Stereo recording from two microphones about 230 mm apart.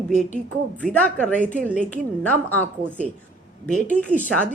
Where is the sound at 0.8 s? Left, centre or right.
Centre.